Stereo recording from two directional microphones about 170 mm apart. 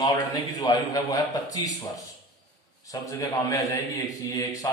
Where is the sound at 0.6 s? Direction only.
20° left (ahead or behind).